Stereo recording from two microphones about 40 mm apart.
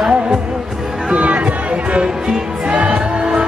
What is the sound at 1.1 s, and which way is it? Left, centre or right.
Music, right.